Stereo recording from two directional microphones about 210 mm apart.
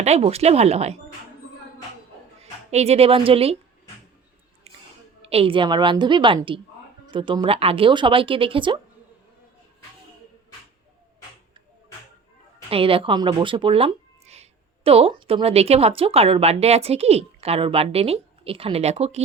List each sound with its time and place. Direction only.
0.0 s speech: 30° right (ahead or behind)
2.4 s a woman's voice: 30° right (ahead or behind)
4.7 s a sound: 30° right (ahead or behind)
5.2 s speech: 30° right (ahead or behind)
12.7 s speech: 25° right (ahead or behind)